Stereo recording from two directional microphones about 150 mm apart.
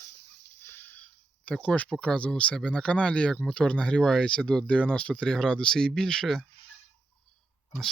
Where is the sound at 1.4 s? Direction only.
5° left (ahead or behind).